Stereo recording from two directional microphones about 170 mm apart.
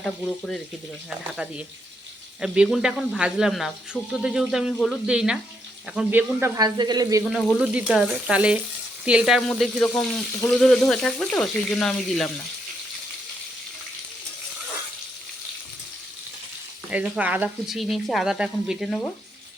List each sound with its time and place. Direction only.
0.0 s speech: 5° left (ahead or behind)
1.4 s speech: 10° right (ahead or behind)
6.6 s speech: 25° right (ahead or behind)
7.3 s speech: centre (ahead or behind)
16.9 s speech: 10° right (ahead or behind)